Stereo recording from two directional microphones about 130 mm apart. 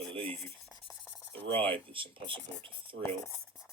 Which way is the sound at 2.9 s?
90° right.